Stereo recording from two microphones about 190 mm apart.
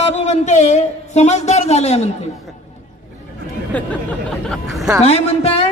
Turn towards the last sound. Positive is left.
turn(degrees=35)  # may be behind; listen again after turning